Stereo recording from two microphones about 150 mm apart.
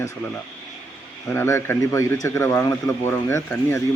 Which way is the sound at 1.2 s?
15° left (ahead or behind).